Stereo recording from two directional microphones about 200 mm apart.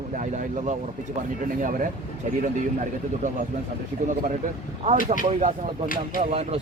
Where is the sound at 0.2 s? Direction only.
40° right (ahead or behind).